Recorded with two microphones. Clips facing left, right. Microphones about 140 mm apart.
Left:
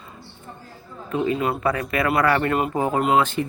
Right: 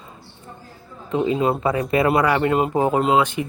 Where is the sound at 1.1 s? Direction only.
20° right (ahead or behind).